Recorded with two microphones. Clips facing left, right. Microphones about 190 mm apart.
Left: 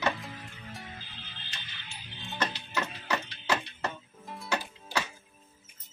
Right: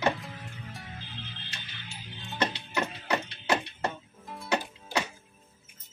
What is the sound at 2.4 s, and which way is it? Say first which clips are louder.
Music: right 3 dB; 20° right (ahead or behind).